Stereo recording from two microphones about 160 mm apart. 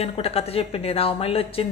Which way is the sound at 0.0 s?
40° left (ahead or behind).